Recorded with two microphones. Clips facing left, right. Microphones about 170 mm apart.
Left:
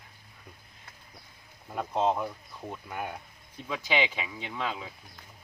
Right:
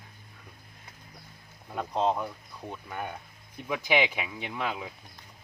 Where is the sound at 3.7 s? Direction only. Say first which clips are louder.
Right 3 dB; 15° right (ahead or behind).